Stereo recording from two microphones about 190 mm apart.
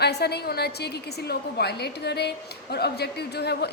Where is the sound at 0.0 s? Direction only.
60° left (ahead or behind).